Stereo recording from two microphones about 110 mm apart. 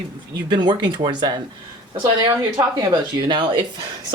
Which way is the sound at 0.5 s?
40° right (ahead or behind).